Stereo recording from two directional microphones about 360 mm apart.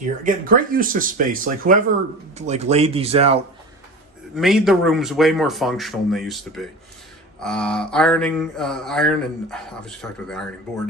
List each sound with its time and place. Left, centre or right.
0.3 s speech: right
4.4 s speech: centre